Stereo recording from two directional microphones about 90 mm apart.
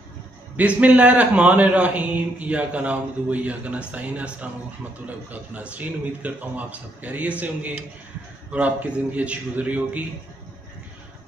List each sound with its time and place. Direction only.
0.6 s a man's voice: 15° right (ahead or behind)